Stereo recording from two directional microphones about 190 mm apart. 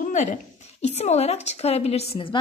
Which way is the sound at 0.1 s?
40° left (ahead or behind).